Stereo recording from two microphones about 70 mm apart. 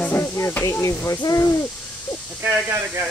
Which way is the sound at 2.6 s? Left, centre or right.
Right.